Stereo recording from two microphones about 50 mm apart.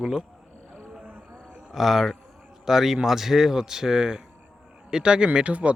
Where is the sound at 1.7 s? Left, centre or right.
Centre.